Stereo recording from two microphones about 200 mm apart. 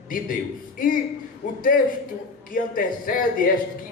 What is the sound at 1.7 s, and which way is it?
Speech, 50° left (ahead or behind).